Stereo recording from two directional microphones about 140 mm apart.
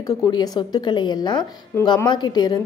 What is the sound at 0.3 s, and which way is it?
A woman's voice, 30° left (ahead or behind).